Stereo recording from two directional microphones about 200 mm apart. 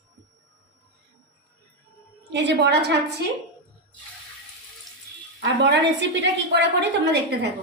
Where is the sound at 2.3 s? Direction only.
60° right (ahead or behind).